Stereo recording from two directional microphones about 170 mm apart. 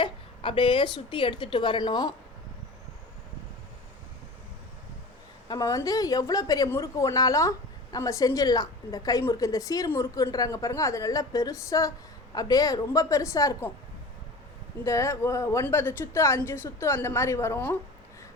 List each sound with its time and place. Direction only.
0.0 s a woman's voice: 30° left (ahead or behind)
5.5 s a woman's voice: 20° left (ahead or behind)
14.8 s speech: 15° left (ahead or behind)